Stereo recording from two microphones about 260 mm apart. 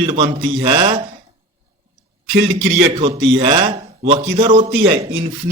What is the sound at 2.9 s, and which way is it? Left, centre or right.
A man's voice, right.